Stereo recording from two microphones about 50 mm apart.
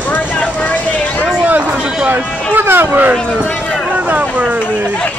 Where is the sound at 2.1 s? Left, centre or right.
Right.